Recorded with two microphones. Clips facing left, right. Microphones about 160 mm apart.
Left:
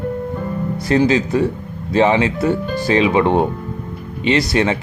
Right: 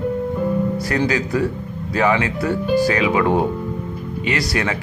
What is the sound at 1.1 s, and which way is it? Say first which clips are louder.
Speech: left 4 dB; 25° left (ahead or behind).